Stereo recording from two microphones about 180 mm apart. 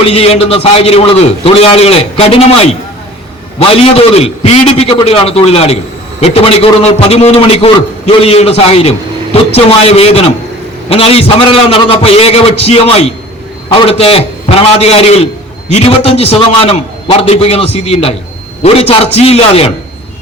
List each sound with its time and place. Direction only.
0.0 s a man's voice: 35° left (ahead or behind)
3.7 s a man's voice: 30° left (ahead or behind)